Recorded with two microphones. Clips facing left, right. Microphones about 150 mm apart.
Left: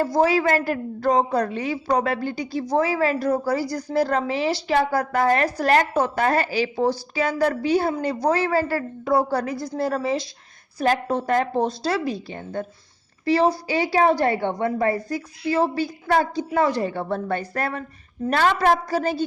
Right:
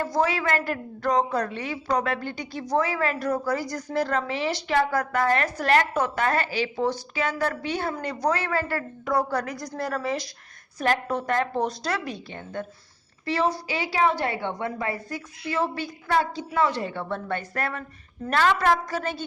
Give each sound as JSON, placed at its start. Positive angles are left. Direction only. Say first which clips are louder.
{"t": 0.0, "sound": "a woman's voice", "louder": "left 5 dB", "side_deg": 35}